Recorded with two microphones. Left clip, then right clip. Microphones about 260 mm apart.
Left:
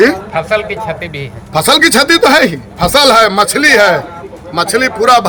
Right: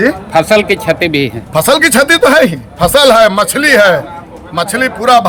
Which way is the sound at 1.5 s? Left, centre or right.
Centre.